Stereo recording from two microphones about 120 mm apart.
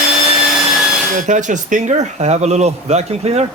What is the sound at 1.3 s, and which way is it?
A man's voice, 90° right.